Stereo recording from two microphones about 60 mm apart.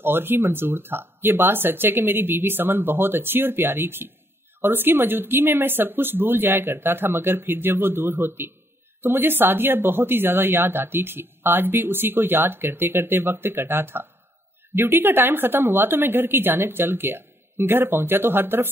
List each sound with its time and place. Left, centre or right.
0.0 s a woman's voice: right